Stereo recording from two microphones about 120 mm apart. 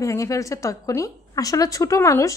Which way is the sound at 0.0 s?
25° left (ahead or behind).